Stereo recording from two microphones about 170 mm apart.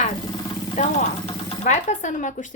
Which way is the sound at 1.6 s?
45° left (ahead or behind).